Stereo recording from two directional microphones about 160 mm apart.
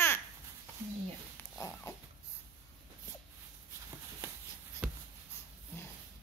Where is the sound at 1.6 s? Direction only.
20° left (ahead or behind).